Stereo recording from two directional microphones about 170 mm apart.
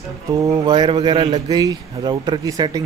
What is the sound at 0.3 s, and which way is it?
Speech, 20° right (ahead or behind).